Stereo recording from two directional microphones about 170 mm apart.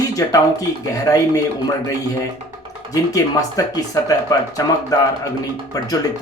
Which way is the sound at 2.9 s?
20° left (ahead or behind).